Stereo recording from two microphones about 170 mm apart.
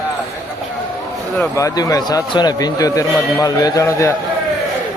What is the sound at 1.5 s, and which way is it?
Speech, 20° left (ahead or behind).